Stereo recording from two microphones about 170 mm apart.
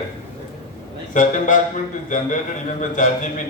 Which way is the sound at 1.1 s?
50° left (ahead or behind).